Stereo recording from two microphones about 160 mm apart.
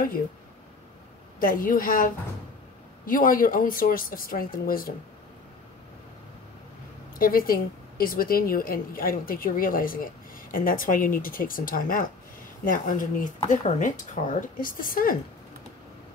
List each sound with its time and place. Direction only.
1.4 s a woman's voice: 60° left (ahead or behind)
7.2 s a woman's voice: 65° left (ahead or behind)